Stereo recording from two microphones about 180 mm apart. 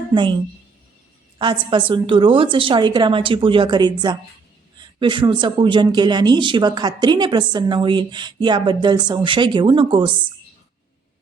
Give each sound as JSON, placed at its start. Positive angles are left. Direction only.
{"t": 0.1, "sound": "a woman's voice", "side_deg": -25}
{"t": 1.4, "sound": "speech", "side_deg": -25}
{"t": 4.9, "sound": "speech", "side_deg": -25}